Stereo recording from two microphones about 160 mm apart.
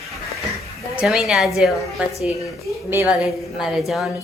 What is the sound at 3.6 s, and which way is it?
Speech, centre (ahead or behind).